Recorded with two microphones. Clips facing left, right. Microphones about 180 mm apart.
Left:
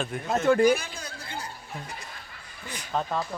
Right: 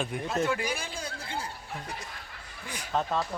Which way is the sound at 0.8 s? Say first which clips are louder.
Right 2 dB; 30° right (ahead or behind).